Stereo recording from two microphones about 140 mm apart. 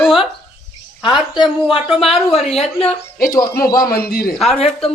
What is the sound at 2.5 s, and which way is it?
Speech, 45° left (ahead or behind).